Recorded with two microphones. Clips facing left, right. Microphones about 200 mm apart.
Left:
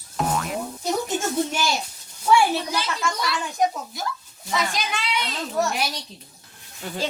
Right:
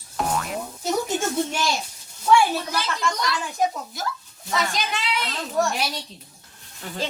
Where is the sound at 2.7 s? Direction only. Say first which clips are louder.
Even; 5° left (ahead or behind).